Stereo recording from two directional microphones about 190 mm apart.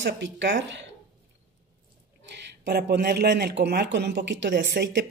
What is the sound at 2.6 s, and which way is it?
Speech, 60° right (ahead or behind).